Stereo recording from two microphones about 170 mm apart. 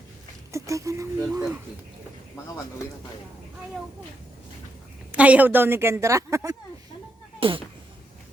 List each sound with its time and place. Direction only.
0.5 s a woman's voice: 20° right (ahead or behind)
5.1 s a woman's voice: 10° right (ahead or behind)
7.3 s speech: 30° right (ahead or behind)